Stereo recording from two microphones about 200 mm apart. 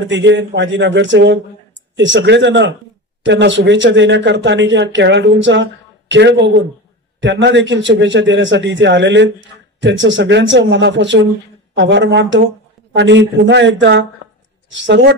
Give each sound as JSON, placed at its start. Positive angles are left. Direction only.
{"t": 0.0, "sound": "a man's voice", "side_deg": -65}